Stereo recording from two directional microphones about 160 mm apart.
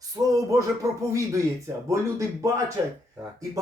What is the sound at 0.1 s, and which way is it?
Speech, 20° right (ahead or behind).